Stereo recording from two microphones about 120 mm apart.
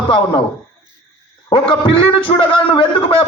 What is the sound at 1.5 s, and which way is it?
A man's voice, 45° left (ahead or behind).